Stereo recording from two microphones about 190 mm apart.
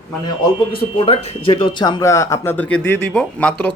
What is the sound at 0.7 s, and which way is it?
Speech, 30° left (ahead or behind).